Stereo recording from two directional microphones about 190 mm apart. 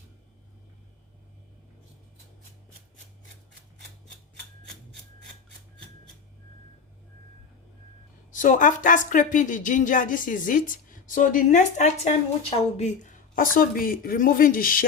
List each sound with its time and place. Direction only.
8.3 s speech: 45° left (ahead or behind)